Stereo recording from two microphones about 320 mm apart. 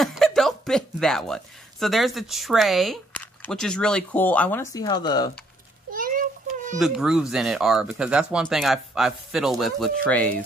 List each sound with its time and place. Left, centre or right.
0.0 s speech: centre
5.9 s a sound: right
6.8 s speech: centre